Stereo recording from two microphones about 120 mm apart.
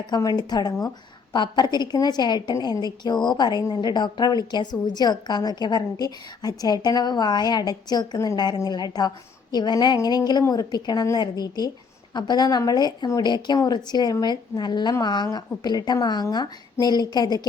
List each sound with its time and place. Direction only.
0.1 s a woman's voice: 35° left (ahead or behind)